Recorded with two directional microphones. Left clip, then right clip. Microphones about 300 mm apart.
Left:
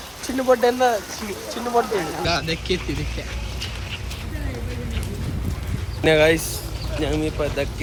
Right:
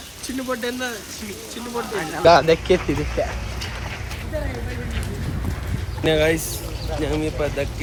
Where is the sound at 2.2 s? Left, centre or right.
Centre.